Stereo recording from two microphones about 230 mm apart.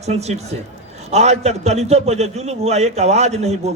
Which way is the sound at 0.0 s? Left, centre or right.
Right.